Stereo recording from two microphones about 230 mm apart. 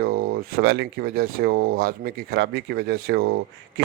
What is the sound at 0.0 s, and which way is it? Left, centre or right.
A man's voice, right.